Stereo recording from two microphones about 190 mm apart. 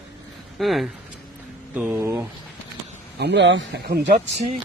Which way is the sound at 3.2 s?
65° right (ahead or behind).